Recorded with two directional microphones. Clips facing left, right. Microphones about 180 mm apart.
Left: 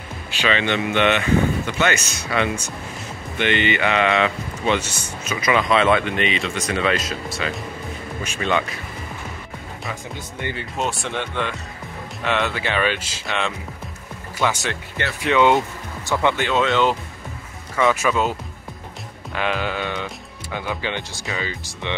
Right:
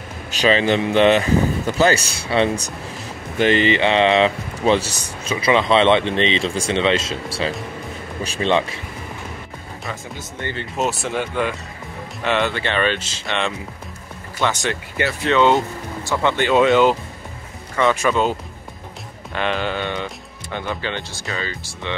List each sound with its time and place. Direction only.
0.3 s speech: 40° right (ahead or behind)
10.1 s speech: 15° left (ahead or behind)
10.8 s speech: 5° right (ahead or behind); by 16.3 s 15° left (ahead or behind)
16.5 s speech: 10° right (ahead or behind)
17.7 s speech: 5° left (ahead or behind)
19.3 s speech: 5° left (ahead or behind)